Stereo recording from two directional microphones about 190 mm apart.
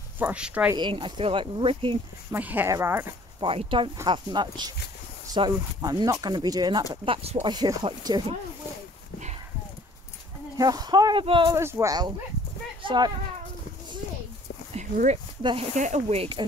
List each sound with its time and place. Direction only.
0.2 s speech: 5° right (ahead or behind)
0.7 s speech: 25° right (ahead or behind)
2.3 s speech: 10° right (ahead or behind)
3.3 s speech: 25° right (ahead or behind)
10.6 s speech: 20° right (ahead or behind)
11.5 s speech: 15° right (ahead or behind)
14.7 s dog: 40° right (ahead or behind)
15.7 s speech: 40° right (ahead or behind)